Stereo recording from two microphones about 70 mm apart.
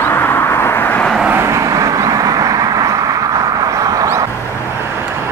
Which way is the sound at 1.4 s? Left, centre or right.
Right.